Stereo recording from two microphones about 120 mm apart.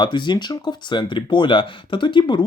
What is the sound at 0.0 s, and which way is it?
Speech, 40° left (ahead or behind).